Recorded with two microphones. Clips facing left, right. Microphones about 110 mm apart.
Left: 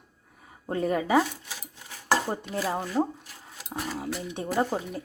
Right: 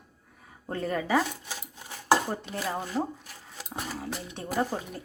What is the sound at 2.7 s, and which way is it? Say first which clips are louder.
Speech: left 3 dB; 5° left (ahead or behind).